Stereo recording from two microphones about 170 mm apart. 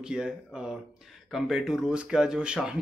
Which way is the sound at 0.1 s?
5° right (ahead or behind).